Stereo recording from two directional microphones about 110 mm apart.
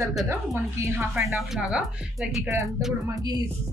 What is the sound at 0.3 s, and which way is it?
Speech, 25° right (ahead or behind).